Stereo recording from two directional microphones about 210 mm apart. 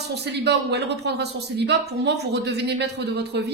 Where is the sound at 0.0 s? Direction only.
55° right (ahead or behind).